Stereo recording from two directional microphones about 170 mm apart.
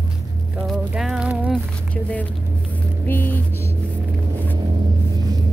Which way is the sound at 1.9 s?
10° left (ahead or behind).